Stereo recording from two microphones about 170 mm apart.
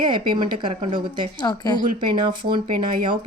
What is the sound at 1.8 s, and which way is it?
Speech, 30° right (ahead or behind).